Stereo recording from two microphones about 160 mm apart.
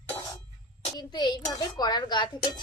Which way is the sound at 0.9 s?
25° left (ahead or behind).